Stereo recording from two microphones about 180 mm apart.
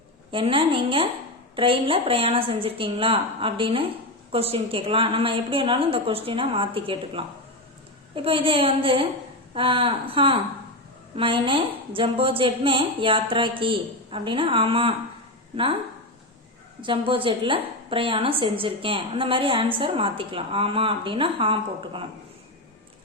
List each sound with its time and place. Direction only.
0.3 s a woman's voice: 30° right (ahead or behind)
16.8 s a woman's voice: 30° right (ahead or behind)